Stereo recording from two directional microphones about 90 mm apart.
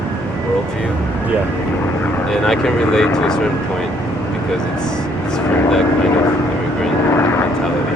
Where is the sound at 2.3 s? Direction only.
5° left (ahead or behind).